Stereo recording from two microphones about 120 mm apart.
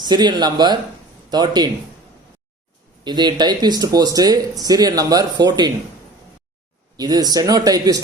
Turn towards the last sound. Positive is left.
turn(degrees=-30)  # may be behind; listen again after turning